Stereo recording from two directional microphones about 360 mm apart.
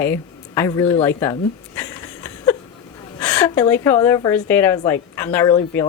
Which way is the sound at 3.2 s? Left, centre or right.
Centre.